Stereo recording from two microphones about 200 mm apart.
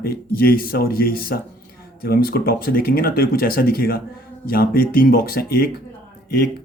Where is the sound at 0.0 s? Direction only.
50° left (ahead or behind).